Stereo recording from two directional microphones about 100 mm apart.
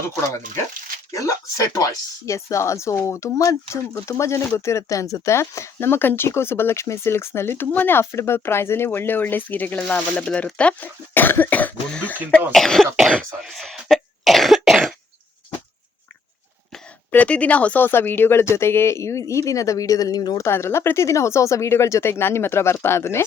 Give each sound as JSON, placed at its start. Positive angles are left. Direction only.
{"t": 0.0, "sound": "speech", "side_deg": 25}
{"t": 12.5, "sound": "cough", "side_deg": 5}
{"t": 17.1, "sound": "speech", "side_deg": 15}
{"t": 20.4, "sound": "speech", "side_deg": 25}